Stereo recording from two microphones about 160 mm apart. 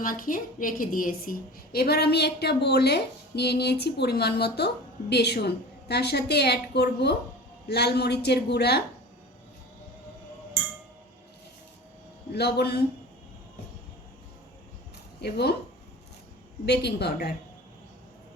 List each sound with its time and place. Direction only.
0.0 s a woman's voice: 60° left (ahead or behind); by 8.8 s 90° left
12.3 s a woman's voice: 90° left
15.2 s a woman's voice: 90° left
16.6 s a woman's voice: 90° left